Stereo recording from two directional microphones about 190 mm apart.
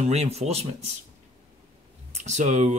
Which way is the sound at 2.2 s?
40° right (ahead or behind).